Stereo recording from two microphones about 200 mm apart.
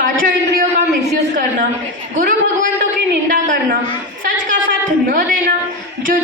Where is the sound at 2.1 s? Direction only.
40° right (ahead or behind).